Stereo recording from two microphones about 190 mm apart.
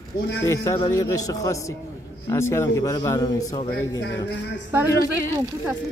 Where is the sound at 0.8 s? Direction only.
15° left (ahead or behind).